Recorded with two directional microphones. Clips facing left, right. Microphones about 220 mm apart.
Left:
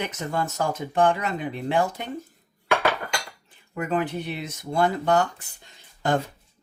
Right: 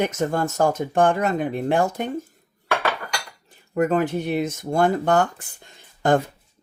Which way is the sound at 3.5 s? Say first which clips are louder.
Right 8 dB; 45° right (ahead or behind).